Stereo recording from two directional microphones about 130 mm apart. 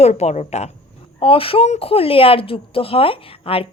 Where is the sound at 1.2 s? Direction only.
45° left (ahead or behind).